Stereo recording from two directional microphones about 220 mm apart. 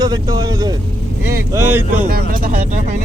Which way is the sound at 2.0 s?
40° right (ahead or behind).